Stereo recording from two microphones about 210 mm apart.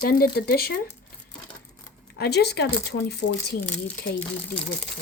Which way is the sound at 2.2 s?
50° left (ahead or behind).